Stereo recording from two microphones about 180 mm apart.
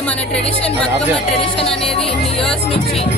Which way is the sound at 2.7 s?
30° left (ahead or behind).